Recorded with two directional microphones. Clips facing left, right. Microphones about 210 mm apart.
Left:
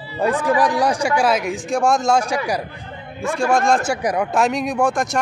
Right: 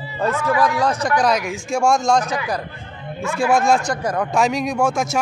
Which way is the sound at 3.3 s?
5° right (ahead or behind).